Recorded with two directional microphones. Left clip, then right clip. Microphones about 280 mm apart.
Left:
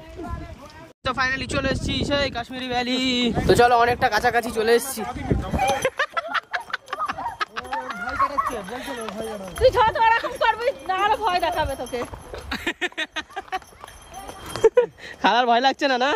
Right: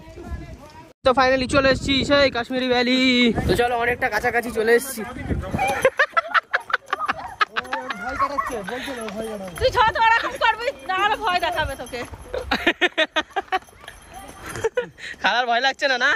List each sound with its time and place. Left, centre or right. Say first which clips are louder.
1.0 s speech: right 6 dB; centre
4.1 s speech: left 1 dB; centre
5.7 s a sound: right 7 dB; centre
9.6 s speech: left 1 dB; left
12.4 s a sound: right 7 dB; centre
14.8 s speech: left 4 dB; centre